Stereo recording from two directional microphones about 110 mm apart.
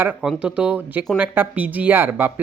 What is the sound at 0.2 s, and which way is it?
Speech, 5° right (ahead or behind).